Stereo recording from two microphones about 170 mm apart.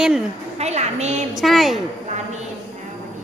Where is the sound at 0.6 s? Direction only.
40° right (ahead or behind).